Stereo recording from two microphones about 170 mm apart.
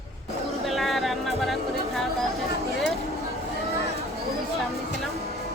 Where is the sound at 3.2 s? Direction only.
35° right (ahead or behind).